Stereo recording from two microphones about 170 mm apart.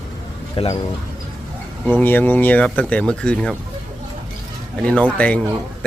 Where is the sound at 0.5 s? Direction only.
30° left (ahead or behind).